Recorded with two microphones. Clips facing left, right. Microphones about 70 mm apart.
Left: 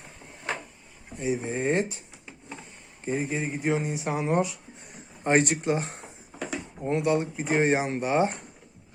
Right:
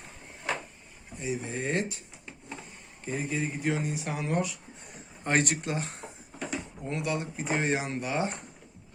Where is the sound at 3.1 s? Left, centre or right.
Left.